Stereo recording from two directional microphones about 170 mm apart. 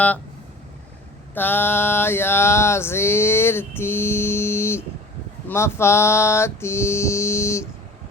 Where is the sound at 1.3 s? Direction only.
10° left (ahead or behind).